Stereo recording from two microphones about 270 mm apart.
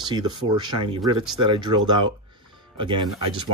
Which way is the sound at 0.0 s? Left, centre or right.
Centre.